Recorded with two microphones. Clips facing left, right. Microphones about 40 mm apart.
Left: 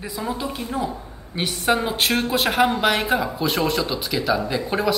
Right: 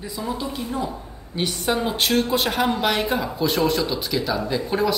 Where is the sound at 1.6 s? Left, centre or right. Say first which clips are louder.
Left 4 dB; left.